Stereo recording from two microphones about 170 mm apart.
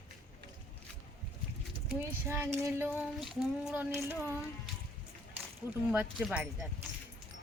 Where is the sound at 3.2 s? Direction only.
Centre (ahead or behind).